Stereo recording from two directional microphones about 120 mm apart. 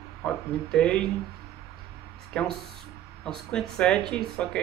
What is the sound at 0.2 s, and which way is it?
Speech, 5° left (ahead or behind).